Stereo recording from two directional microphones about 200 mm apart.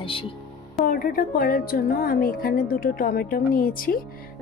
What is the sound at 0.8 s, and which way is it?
A woman's voice, 45° left (ahead or behind).